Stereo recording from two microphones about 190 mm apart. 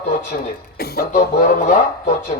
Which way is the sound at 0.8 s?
55° left (ahead or behind).